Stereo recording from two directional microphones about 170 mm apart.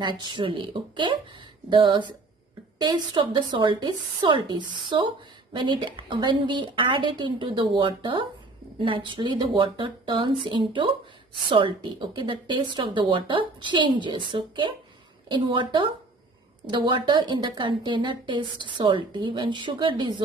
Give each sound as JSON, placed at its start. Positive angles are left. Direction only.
{"t": 0.2, "sound": "a woman's voice", "side_deg": -30}